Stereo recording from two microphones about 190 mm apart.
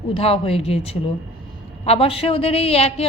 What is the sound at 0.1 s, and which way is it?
A woman's voice, 30° left (ahead or behind).